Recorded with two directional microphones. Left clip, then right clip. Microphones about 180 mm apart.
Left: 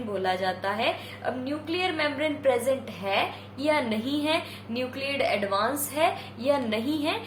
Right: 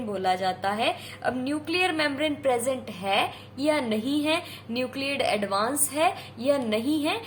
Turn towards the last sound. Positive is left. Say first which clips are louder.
# right 2 dB
turn(degrees=-25)  # may be behind; listen again after turning